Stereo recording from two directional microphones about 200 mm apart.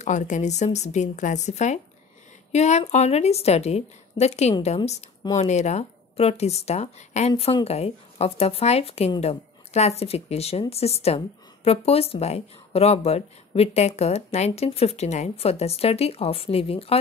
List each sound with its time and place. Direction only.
0.0 s speech: 40° left (ahead or behind)